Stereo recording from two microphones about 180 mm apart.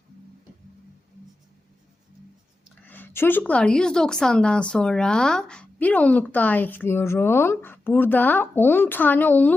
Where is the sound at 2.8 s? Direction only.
10° left (ahead or behind).